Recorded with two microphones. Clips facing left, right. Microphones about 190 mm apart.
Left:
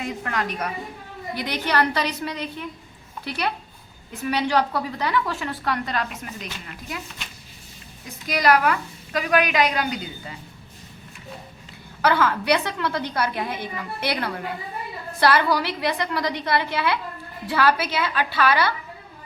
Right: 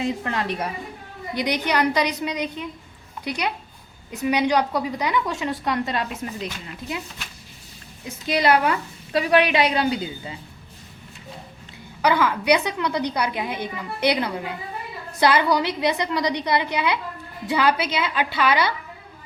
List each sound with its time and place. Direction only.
0.0 s a woman's voice: 25° right (ahead or behind)
1.4 s a woman's voice: 15° right (ahead or behind)
8.3 s a woman's voice: 25° right (ahead or behind)
12.0 s a woman's voice: 15° right (ahead or behind)